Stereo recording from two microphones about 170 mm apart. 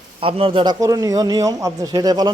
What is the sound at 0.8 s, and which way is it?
A man's voice, 20° right (ahead or behind).